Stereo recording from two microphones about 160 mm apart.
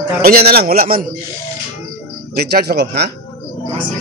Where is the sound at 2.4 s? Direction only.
85° right.